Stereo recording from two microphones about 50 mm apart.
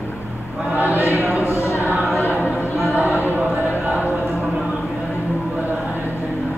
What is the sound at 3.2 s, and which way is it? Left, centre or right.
Speech, right.